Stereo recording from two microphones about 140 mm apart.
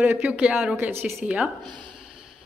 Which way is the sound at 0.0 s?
10° right (ahead or behind).